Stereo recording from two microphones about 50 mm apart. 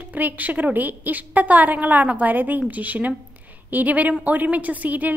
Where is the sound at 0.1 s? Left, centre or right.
Right.